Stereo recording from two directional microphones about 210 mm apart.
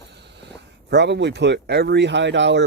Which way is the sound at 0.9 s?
55° right (ahead or behind).